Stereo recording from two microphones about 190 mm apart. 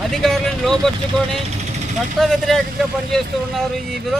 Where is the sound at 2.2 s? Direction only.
Centre (ahead or behind).